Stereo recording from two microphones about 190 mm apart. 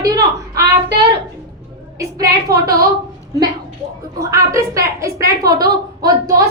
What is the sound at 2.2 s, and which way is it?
Speech, 20° right (ahead or behind).